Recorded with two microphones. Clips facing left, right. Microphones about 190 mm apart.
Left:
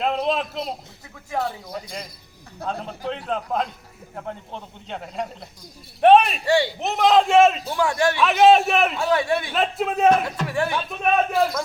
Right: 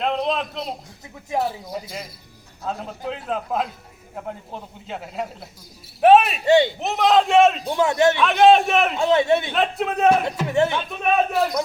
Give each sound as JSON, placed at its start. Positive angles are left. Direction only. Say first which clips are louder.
{"t": 0.0, "sound": "a man's voice", "louder": "even", "side_deg": 0}
{"t": 1.3, "sound": "a man's voice", "louder": "right 2 dB", "side_deg": -25}
{"t": 1.6, "sound": "a man's voice", "louder": "right 2 dB", "side_deg": 0}
{"t": 6.4, "sound": "a man's voice", "louder": "right 4 dB", "side_deg": -20}
{"t": 6.7, "sound": "a man's voice", "louder": "even", "side_deg": 0}
{"t": 7.7, "sound": "a man's voice", "louder": "right 3 dB", "side_deg": -20}
{"t": 8.2, "sound": "a man's voice", "louder": "left 2 dB", "side_deg": 0}
{"t": 9.0, "sound": "a man's voice", "louder": "right 3 dB", "side_deg": -20}
{"t": 9.5, "sound": "a man's voice", "louder": "right 1 dB", "side_deg": 0}
{"t": 10.4, "sound": "a man's voice", "louder": "right 4 dB", "side_deg": -20}
{"t": 10.8, "sound": "a man's voice", "louder": "even", "side_deg": 0}